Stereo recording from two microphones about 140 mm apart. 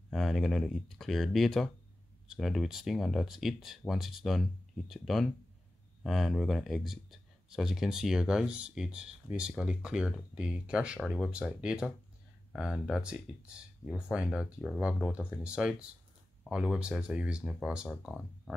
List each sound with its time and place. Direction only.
0.1 s speech: centre (ahead or behind)